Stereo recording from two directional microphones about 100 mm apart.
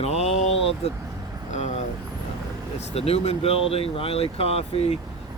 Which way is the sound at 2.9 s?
90° left.